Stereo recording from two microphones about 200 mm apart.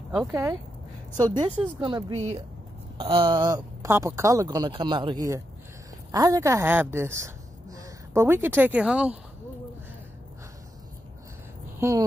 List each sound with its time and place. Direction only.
0.3 s speech: 15° right (ahead or behind)
11.8 s speech: 10° right (ahead or behind)